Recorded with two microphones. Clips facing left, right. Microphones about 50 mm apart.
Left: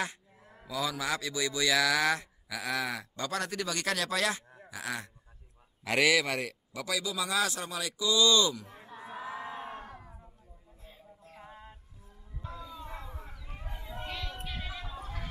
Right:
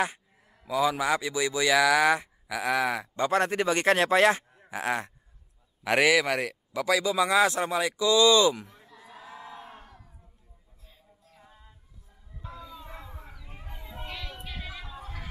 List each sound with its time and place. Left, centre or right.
0.7 s speech: right
5.9 s speech: centre
6.8 s speech: right
8.6 s crowd: left; by 10.1 s centre
11.2 s music: left
12.4 s a sound: centre